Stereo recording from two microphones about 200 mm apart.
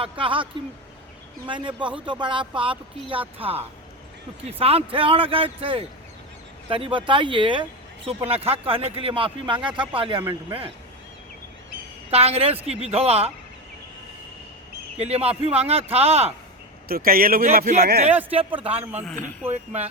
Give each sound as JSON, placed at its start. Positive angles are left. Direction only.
{"t": 0.0, "sound": "speech", "side_deg": -25}
{"t": 12.1, "sound": "speech", "side_deg": -30}
{"t": 14.9, "sound": "speech", "side_deg": -30}
{"t": 16.9, "sound": "speech", "side_deg": -45}
{"t": 18.1, "sound": "speech", "side_deg": -10}
{"t": 18.3, "sound": "speech", "side_deg": -30}